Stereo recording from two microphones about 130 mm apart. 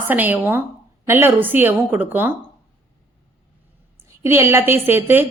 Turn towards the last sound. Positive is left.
turn(degrees=-15)  # may be behind; listen again after turning